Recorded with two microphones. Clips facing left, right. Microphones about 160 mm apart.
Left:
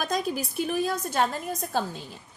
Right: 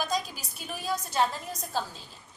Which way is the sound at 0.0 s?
55° left (ahead or behind).